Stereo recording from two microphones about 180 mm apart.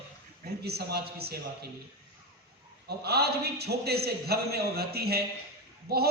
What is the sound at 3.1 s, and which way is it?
A man's voice, 60° right (ahead or behind).